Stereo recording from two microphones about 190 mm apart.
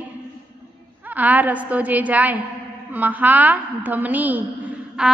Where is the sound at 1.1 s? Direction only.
10° right (ahead or behind).